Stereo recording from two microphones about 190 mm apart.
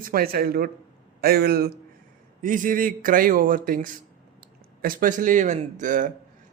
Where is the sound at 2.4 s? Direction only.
45° right (ahead or behind).